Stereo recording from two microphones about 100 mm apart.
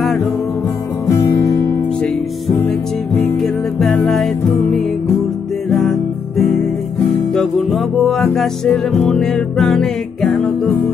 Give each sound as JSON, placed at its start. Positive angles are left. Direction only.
{"t": 0.0, "sound": "music", "side_deg": 0}
{"t": 1.1, "sound": "music", "side_deg": 30}
{"t": 3.3, "sound": "music", "side_deg": 0}
{"t": 5.7, "sound": "music", "side_deg": 0}